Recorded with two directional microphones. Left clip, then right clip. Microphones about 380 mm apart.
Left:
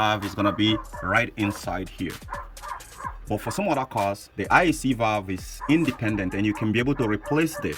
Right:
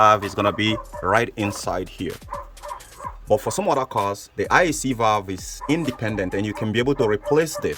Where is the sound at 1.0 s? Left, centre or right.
Centre.